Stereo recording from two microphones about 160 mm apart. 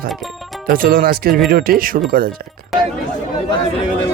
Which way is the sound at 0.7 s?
60° right (ahead or behind).